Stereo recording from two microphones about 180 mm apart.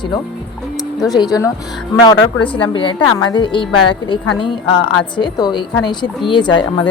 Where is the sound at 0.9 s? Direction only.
20° left (ahead or behind).